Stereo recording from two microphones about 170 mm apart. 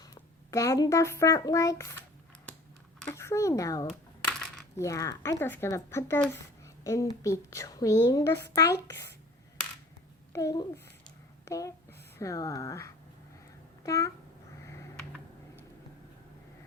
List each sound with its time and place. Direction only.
0.0 s a child's voice: 20° left (ahead or behind)
3.0 s speech: 15° left (ahead or behind)
3.8 s coin: centre (ahead or behind)
4.8 s a woman's voice: 20° left (ahead or behind)
10.3 s a woman's voice: 20° left (ahead or behind)